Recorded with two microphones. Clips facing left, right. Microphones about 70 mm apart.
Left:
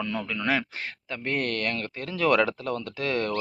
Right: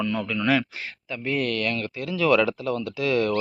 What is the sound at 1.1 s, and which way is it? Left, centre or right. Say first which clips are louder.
A man's voice: right 3 dB; left.